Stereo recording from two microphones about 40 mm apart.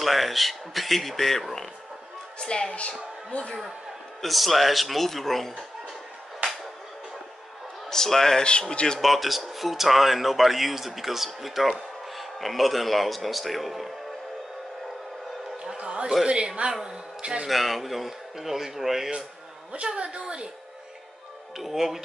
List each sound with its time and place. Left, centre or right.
0.0 s speech: centre
2.3 s speech: left
3.3 s a woman's voice: left
4.2 s speech: centre
7.9 s a man's voice: centre
8.5 s speech: left
9.0 s speech: centre
15.6 s a sound: right
16.3 s a woman's voice: right
16.8 s a sound: right
17.5 s speech: centre
19.7 s a woman's voice: right
21.5 s speech: centre